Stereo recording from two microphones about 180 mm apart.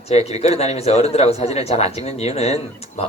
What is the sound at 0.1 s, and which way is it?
A man's voice, 35° left (ahead or behind).